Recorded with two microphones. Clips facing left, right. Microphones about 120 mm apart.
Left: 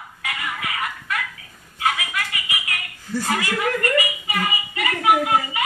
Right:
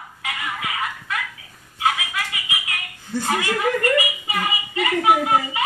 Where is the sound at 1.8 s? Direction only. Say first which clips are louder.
Right 1 dB; 20° right (ahead or behind).